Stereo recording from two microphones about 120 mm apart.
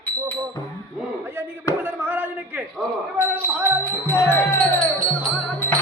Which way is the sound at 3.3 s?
15° left (ahead or behind).